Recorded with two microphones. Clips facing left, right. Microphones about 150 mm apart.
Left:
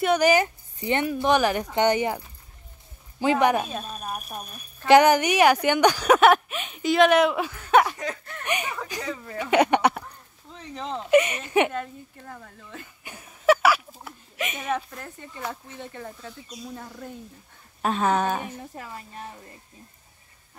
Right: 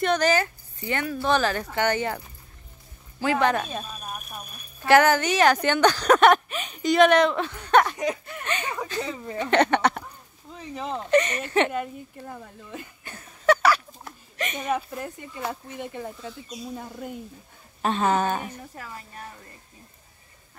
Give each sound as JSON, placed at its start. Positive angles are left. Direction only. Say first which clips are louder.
{"t": 0.0, "sound": "a woman's voice", "louder": "left 2 dB", "side_deg": 10}
{"t": 4.8, "sound": "a woman's voice", "louder": "left 2 dB", "side_deg": 15}
{"t": 7.9, "sound": "speech", "louder": "right 5 dB", "side_deg": -15}
{"t": 8.5, "sound": "a woman's voice", "louder": "left 2 dB", "side_deg": 15}
{"t": 9.0, "sound": "speech", "louder": "right 1 dB", "side_deg": -20}
{"t": 9.4, "sound": "a woman's voice", "louder": "left 1 dB", "side_deg": 10}
{"t": 10.0, "sound": "a sound", "louder": "right 1 dB", "side_deg": -5}
{"t": 11.1, "sound": "a woman's voice", "louder": "left 2 dB", "side_deg": 10}
{"t": 11.7, "sound": "speech", "louder": "right 2 dB", "side_deg": -15}
{"t": 13.0, "sound": "a sound", "louder": "left 1 dB", "side_deg": 10}
{"t": 14.7, "sound": "speech", "louder": "right 3 dB", "side_deg": -10}
{"t": 17.8, "sound": "speech", "louder": "even", "side_deg": 0}
{"t": 18.8, "sound": "a woman's voice", "louder": "left 2 dB", "side_deg": 20}